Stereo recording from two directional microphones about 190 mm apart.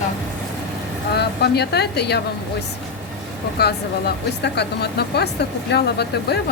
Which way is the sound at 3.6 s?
60° left (ahead or behind).